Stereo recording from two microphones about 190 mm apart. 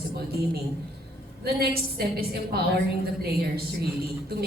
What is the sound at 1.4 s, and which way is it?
A woman's voice, 55° right (ahead or behind).